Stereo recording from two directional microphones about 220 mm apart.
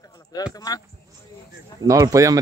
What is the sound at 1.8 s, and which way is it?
Speech, 15° right (ahead or behind).